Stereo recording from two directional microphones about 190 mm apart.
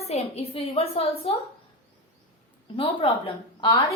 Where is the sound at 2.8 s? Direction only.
30° left (ahead or behind).